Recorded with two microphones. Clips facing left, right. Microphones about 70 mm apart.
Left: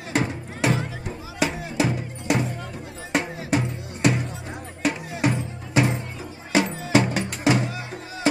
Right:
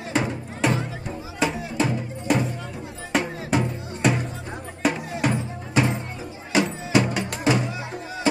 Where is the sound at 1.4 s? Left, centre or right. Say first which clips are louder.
Even; centre.